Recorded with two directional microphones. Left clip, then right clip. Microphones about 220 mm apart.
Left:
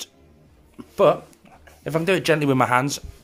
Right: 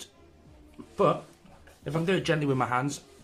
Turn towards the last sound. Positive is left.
turn(degrees=40)  # may be behind; listen again after turning